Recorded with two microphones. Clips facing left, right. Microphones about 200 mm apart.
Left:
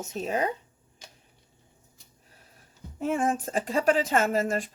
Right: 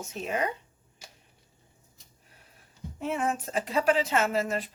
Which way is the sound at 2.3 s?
40° left (ahead or behind).